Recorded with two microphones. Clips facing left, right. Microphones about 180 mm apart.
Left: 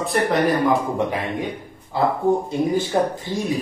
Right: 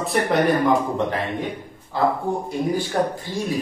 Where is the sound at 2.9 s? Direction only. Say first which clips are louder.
Left 2 dB; 15° left (ahead or behind).